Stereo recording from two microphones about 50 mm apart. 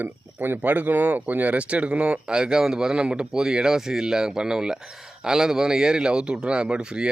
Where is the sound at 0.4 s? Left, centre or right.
Right.